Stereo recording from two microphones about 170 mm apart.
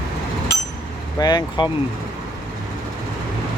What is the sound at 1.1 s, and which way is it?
Speech, 25° left (ahead or behind).